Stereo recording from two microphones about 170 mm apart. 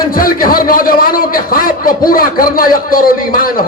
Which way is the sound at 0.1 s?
55° left (ahead or behind).